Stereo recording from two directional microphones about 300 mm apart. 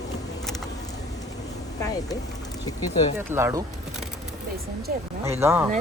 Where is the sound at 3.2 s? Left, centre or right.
Centre.